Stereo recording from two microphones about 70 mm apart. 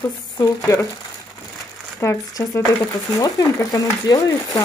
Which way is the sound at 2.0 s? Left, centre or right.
Left.